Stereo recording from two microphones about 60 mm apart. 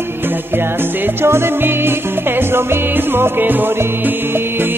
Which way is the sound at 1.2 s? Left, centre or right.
Right.